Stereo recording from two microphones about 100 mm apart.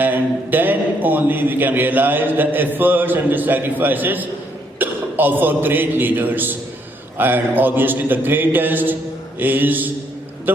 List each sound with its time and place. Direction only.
0.0 s a man's voice: 20° right (ahead or behind)